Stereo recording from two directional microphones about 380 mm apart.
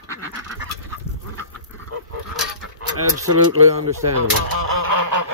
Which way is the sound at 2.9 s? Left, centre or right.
Right.